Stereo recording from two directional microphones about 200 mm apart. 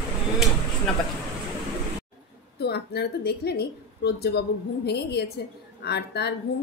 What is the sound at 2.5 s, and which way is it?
A woman's voice, 55° left (ahead or behind).